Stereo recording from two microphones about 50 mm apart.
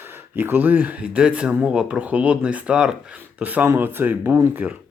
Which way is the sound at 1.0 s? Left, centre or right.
Right.